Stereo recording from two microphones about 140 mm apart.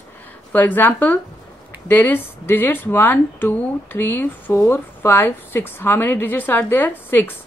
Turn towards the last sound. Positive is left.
turn(degrees=15)  # may be behind; listen again after turning